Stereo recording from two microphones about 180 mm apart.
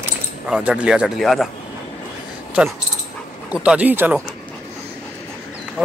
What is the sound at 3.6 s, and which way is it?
Speech, 5° right (ahead or behind).